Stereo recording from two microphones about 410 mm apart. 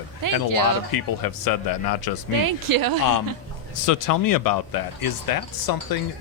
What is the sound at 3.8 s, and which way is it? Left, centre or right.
Speech, left.